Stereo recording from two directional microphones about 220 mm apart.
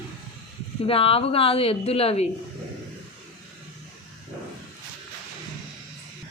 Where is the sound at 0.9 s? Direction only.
25° left (ahead or behind).